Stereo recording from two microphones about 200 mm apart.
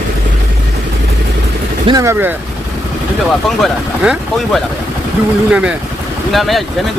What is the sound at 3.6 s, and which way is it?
Speech, centre (ahead or behind).